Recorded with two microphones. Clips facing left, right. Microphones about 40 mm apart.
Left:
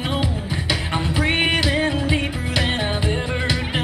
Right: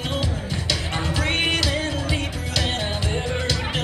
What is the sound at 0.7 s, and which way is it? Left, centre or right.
Music, centre.